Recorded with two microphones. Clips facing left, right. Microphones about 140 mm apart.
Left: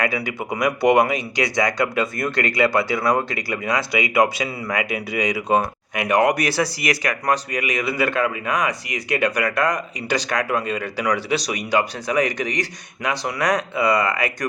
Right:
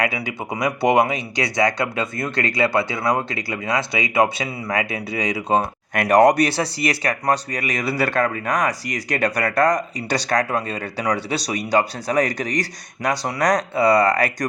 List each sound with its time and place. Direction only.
0.0 s speech: 25° right (ahead or behind)
5.9 s speech: 40° right (ahead or behind)